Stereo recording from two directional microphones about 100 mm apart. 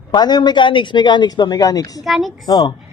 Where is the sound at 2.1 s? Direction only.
Centre (ahead or behind).